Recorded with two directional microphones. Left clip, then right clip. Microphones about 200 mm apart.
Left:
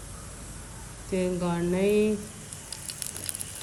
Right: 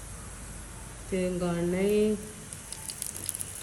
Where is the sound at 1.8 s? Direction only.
20° right (ahead or behind).